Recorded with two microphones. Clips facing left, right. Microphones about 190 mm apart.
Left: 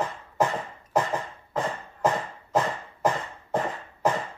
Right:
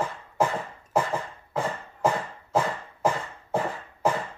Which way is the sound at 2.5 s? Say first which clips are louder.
Even; 10° right (ahead or behind).